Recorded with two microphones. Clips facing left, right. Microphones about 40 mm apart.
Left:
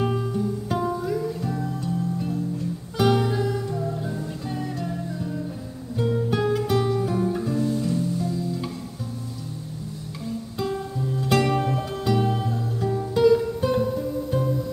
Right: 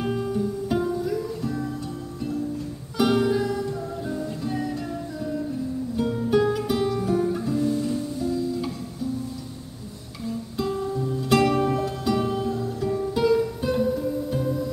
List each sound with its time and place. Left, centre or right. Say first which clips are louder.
0.0 s music: left 1 dB; centre
5.9 s guitar: right 1 dB; centre
10.6 s music: right 2 dB; centre